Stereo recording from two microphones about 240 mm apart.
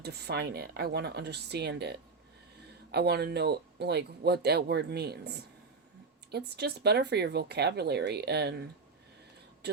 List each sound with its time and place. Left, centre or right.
0.0 s speech: right
6.3 s speech: right